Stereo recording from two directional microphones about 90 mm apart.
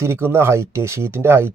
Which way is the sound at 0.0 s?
25° right (ahead or behind).